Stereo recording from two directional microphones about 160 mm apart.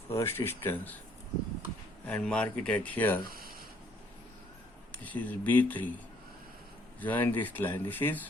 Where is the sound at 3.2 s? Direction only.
65° right (ahead or behind).